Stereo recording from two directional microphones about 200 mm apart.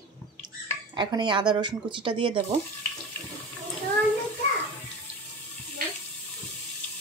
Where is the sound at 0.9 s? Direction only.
25° right (ahead or behind).